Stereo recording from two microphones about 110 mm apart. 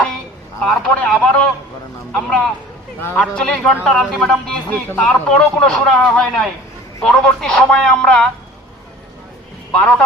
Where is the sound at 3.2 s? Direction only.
10° left (ahead or behind).